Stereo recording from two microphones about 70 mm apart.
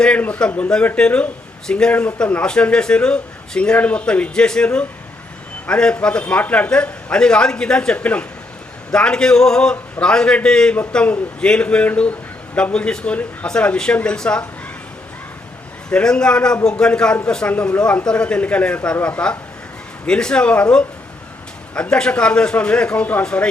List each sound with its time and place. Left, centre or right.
0.0 s speech: centre
15.9 s speech: centre